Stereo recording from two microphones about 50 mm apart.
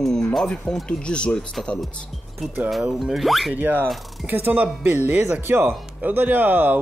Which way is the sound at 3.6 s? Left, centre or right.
Right.